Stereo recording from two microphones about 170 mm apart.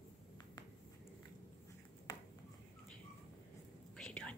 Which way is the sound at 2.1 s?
20° left (ahead or behind).